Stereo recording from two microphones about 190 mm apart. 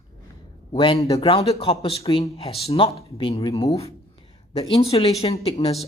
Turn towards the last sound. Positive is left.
turn(degrees=30)  # may be behind; listen again after turning